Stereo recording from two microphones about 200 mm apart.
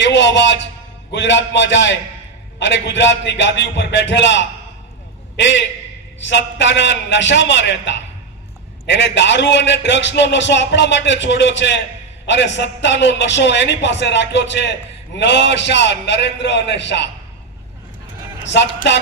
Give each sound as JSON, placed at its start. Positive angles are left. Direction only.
{"t": 0.0, "sound": "music", "side_deg": 65}
{"t": 1.1, "sound": "a man's voice", "side_deg": 65}